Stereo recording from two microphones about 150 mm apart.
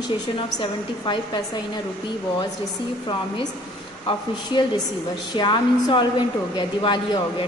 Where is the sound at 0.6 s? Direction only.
30° left (ahead or behind).